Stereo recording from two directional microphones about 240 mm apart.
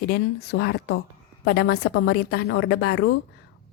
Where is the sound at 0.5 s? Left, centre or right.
Left.